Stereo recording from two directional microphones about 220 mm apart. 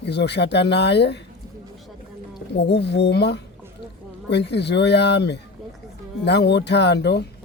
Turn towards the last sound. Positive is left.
turn(degrees=50)  # may be behind; listen again after turning